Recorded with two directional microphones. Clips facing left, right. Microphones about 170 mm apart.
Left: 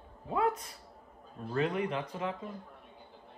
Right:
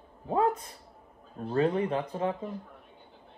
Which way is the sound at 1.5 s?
35° right (ahead or behind).